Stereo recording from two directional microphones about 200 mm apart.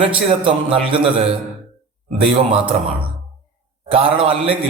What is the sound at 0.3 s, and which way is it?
Speech, 25° right (ahead or behind).